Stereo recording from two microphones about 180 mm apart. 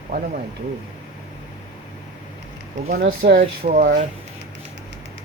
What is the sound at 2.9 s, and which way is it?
Speech, 55° right (ahead or behind).